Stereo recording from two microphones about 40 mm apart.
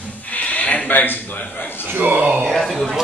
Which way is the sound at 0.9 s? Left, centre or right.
Left.